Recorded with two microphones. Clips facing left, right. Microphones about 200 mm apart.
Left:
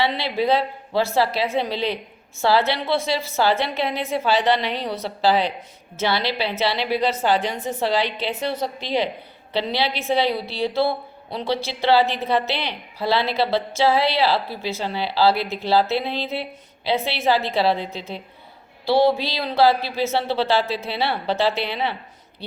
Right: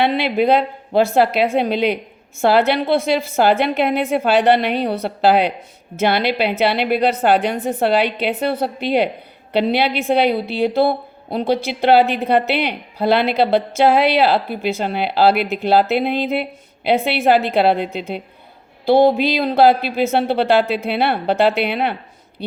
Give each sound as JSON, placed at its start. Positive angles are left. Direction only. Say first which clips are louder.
{"t": 0.0, "sound": "a woman's voice", "louder": "right 6 dB", "side_deg": -55}